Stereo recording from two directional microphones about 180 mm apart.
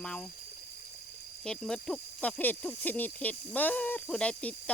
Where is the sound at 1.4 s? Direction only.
5° left (ahead or behind).